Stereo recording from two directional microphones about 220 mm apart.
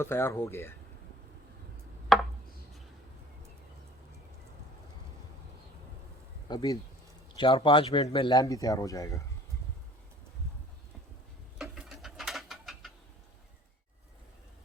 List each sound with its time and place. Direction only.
0.0 s speech: 10° left (ahead or behind)
2.1 s a sound: centre (ahead or behind)
6.5 s speech: 15° left (ahead or behind)
11.5 s ratchet: centre (ahead or behind)